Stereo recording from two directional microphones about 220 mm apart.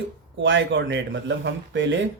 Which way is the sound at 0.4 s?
55° right (ahead or behind).